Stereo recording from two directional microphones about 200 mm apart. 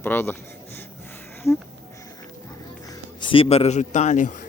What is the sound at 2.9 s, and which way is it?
A man's voice, 25° left (ahead or behind).